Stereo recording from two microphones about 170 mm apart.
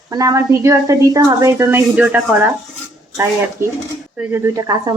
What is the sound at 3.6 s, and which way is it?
Speech, 15° right (ahead or behind).